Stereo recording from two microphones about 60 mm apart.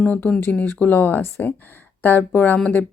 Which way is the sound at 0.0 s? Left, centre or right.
Left.